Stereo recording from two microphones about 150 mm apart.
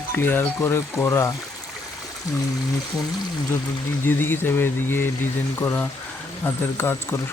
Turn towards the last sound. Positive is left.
turn(degrees=15)  # may be behind; listen again after turning